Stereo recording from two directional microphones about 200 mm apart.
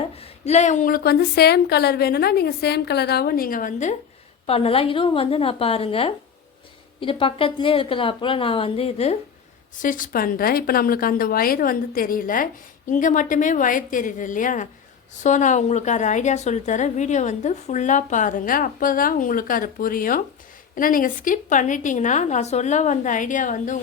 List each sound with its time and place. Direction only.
0.2 s a woman's voice: 30° left (ahead or behind)
9.7 s a woman's voice: 40° left (ahead or behind)